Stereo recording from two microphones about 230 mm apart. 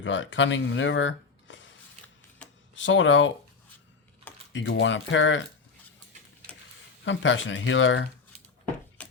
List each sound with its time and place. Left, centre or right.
0.0 s speech: left
2.4 s a sound: centre
2.7 s speech: left
4.5 s speech: left
7.0 s speech: left